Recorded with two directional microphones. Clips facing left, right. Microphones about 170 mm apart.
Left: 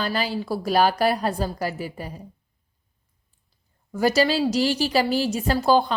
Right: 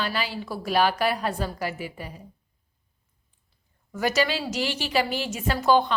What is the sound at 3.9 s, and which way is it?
A woman's voice, 35° left (ahead or behind).